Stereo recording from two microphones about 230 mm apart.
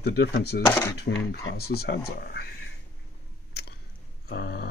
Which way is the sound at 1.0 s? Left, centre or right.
Left.